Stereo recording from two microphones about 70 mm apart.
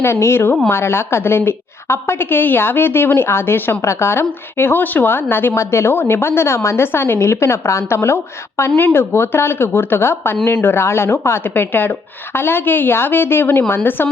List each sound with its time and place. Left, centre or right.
0.0 s a woman's voice: left